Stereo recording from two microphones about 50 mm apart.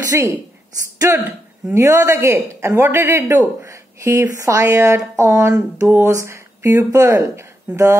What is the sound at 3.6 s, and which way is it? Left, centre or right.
A woman's voice, right.